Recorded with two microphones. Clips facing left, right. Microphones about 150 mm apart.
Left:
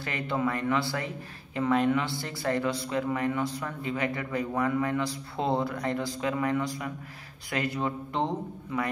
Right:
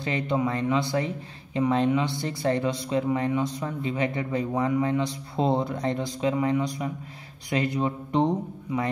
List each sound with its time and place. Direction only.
0.0 s a man's voice: 20° right (ahead or behind)